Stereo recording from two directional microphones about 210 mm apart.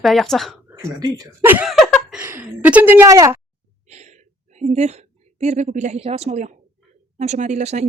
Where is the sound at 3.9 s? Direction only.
30° right (ahead or behind).